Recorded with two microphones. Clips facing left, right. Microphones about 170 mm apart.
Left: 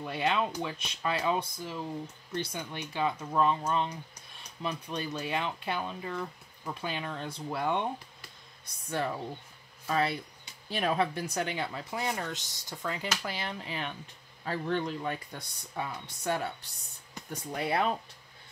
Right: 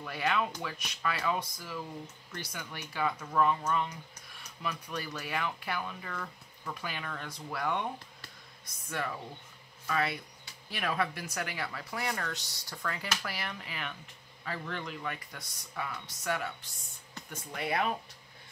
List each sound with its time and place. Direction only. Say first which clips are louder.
0.0 s speech: left 2 dB; 25° left (ahead or behind)
9.8 s speech: left 3 dB; 30° left (ahead or behind)